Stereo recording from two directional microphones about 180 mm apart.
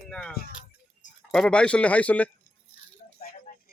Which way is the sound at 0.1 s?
5° left (ahead or behind).